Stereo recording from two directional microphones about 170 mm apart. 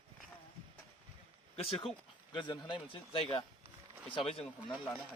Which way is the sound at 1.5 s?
35° left (ahead or behind).